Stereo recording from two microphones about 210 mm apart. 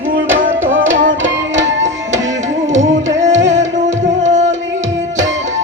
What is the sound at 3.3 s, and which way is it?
Music, 60° right (ahead or behind).